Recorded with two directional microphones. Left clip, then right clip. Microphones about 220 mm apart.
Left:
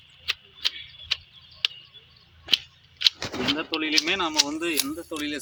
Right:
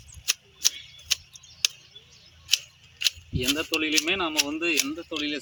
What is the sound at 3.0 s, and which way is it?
Speech, 10° right (ahead or behind).